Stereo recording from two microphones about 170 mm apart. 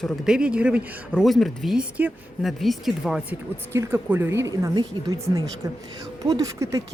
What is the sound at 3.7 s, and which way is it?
A woman's voice, 15° right (ahead or behind).